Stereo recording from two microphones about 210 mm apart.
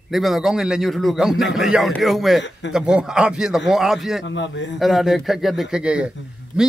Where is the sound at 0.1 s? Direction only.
Centre (ahead or behind).